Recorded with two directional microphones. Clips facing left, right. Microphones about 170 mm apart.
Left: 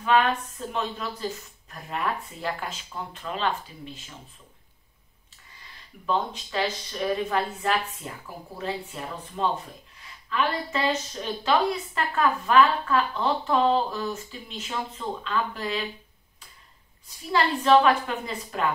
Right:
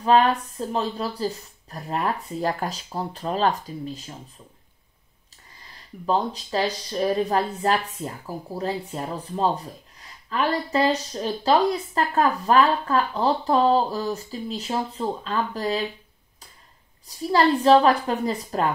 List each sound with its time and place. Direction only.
0.0 s speech: 35° right (ahead or behind)
6.0 s speech: 40° right (ahead or behind)
17.3 s speech: 35° right (ahead or behind)